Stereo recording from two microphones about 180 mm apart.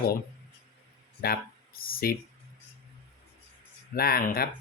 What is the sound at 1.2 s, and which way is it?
Speech, 55° left (ahead or behind).